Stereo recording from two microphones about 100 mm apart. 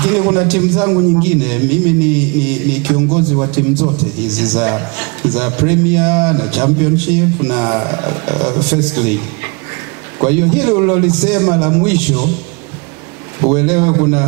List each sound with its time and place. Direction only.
0.0 s speech: 15° right (ahead or behind)
13.4 s speech: 15° right (ahead or behind)